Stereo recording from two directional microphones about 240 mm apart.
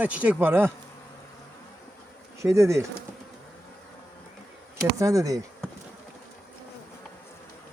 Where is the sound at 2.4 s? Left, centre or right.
Centre.